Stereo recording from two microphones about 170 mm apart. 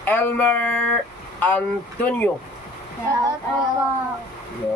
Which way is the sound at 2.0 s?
10° left (ahead or behind).